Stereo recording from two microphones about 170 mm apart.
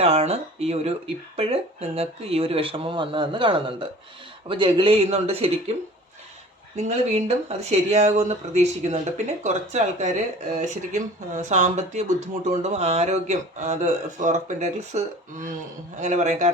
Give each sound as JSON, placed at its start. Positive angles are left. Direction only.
{"t": 0.0, "sound": "speech", "side_deg": -35}
{"t": 6.7, "sound": "speech", "side_deg": -40}